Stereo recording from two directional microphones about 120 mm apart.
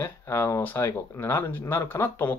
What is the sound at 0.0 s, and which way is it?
Speech, 20° left (ahead or behind).